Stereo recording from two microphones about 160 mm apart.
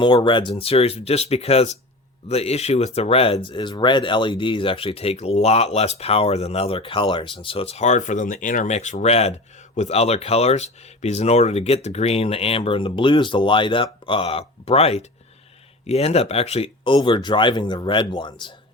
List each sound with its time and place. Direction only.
0.0 s speech: 30° left (ahead or behind)